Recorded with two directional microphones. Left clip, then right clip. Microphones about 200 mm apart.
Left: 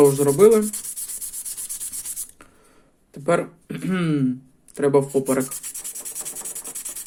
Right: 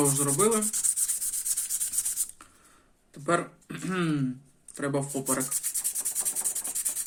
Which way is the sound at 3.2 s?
20° left (ahead or behind).